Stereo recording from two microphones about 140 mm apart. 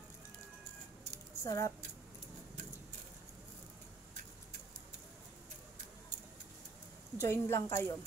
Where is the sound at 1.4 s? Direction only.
20° left (ahead or behind).